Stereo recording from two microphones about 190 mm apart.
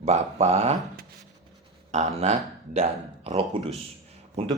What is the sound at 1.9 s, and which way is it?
Speech, 35° right (ahead or behind).